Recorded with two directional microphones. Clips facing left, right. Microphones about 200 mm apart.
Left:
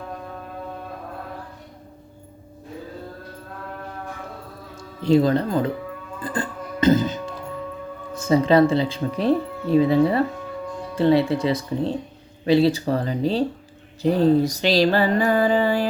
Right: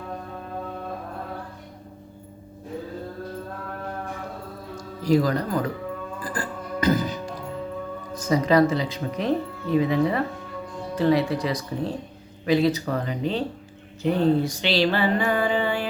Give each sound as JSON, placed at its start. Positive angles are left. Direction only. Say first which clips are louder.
{"t": 4.7, "sound": "speech", "louder": "left 3 dB", "side_deg": 25}
{"t": 6.2, "sound": "music", "louder": "left 6 dB", "side_deg": 25}
{"t": 8.1, "sound": "speech", "louder": "left 3 dB", "side_deg": 30}
{"t": 12.5, "sound": "a sound", "louder": "left 3 dB", "side_deg": 30}